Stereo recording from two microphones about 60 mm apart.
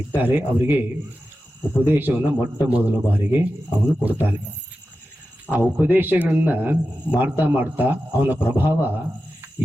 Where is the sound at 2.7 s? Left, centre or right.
Right.